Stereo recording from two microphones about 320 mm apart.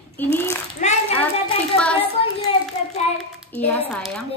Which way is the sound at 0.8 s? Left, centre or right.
Left.